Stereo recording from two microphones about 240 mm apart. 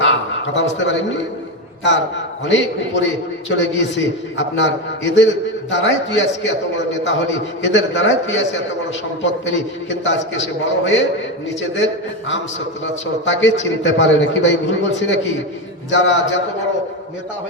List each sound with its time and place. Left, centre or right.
0.0 s a sound: left
1.8 s a man's voice: left
12.8 s a man's voice: left